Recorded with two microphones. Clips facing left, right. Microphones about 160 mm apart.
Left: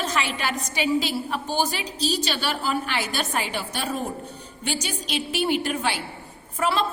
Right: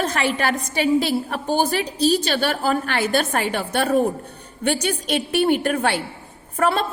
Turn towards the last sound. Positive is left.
turn(degrees=-55)  # may be behind; listen again after turning